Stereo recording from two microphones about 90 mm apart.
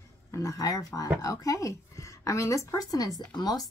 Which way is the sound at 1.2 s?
40° left (ahead or behind).